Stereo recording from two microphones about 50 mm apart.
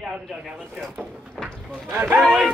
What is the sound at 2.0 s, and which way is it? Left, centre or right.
Speech, right.